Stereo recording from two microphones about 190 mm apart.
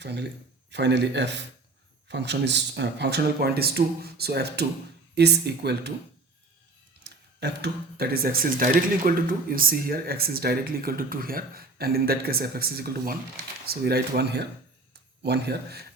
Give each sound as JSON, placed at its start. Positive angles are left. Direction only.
{"t": 0.0, "sound": "speech", "side_deg": -65}
{"t": 7.0, "sound": "speech", "side_deg": -60}